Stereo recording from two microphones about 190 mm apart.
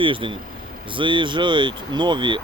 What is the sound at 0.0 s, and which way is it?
Speech, 25° right (ahead or behind).